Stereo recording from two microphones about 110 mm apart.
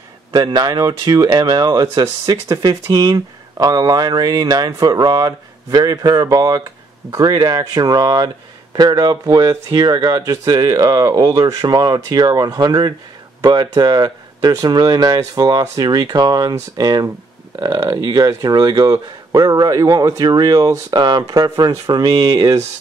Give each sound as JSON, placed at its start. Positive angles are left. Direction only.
{"t": 0.3, "sound": "speech", "side_deg": -40}